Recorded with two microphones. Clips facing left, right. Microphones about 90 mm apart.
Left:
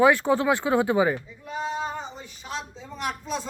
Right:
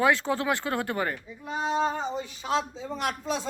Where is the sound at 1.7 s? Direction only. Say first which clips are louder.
Right 5 dB; 75° right (ahead or behind).